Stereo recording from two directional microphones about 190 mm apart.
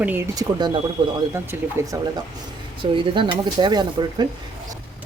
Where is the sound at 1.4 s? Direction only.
15° right (ahead or behind).